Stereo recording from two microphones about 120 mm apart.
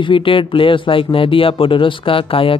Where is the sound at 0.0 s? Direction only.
45° left (ahead or behind).